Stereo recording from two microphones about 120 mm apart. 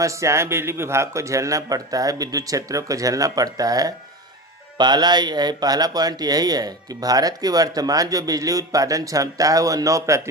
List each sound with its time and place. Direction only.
0.0 s a man's voice: 25° right (ahead or behind)